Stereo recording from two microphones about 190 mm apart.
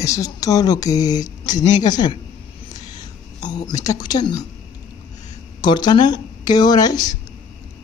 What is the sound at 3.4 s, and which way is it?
Speech, 25° left (ahead or behind).